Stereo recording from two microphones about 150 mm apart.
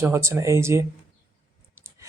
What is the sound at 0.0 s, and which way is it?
Speech, 15° right (ahead or behind).